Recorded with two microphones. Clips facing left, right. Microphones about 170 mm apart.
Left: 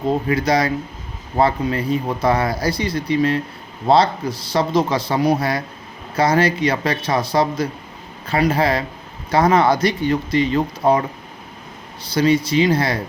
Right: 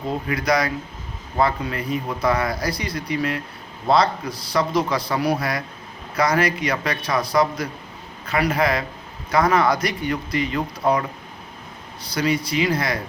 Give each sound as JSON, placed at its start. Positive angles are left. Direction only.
{"t": 0.3, "sound": "a man's voice", "side_deg": 30}
{"t": 12.1, "sound": "a man's voice", "side_deg": 25}